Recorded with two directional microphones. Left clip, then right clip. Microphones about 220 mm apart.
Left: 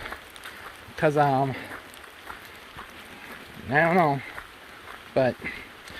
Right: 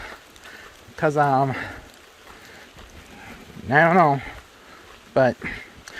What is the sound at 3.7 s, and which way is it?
Speech, 30° right (ahead or behind).